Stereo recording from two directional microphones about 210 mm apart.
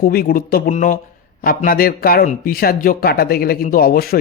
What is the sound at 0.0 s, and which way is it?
A man's voice, 45° left (ahead or behind).